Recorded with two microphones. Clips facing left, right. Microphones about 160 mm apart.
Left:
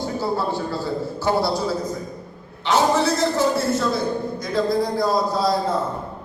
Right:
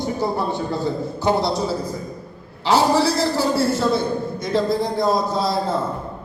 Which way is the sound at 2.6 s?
35° right (ahead or behind).